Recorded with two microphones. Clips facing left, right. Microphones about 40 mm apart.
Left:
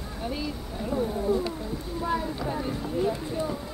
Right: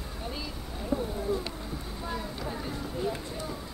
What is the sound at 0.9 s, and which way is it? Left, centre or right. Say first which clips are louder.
Wild animals: left 3 dB; left.